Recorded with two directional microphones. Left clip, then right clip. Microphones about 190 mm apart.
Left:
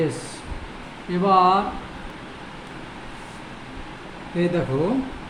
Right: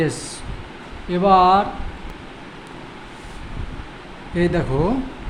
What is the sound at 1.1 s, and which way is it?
Speech, 35° right (ahead or behind).